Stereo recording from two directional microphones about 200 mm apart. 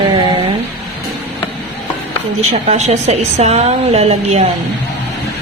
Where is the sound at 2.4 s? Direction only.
30° right (ahead or behind).